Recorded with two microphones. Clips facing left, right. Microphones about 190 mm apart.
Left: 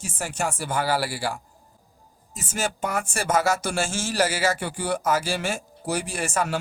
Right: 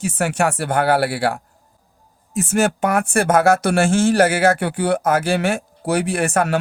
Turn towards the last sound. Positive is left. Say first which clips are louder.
# right 8 dB
turn(degrees=-60)  # may be behind; listen again after turning